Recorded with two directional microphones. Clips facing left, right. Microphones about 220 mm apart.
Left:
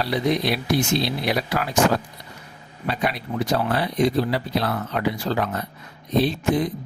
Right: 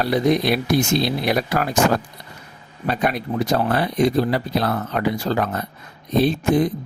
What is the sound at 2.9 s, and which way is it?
Speech, 45° right (ahead or behind).